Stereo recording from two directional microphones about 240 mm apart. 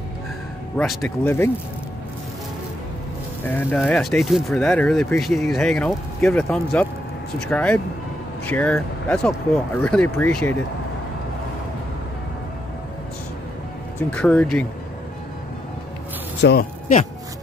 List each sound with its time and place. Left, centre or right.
0.7 s speech: centre
3.4 s speech: centre
14.1 s speech: centre
16.3 s a man's voice: left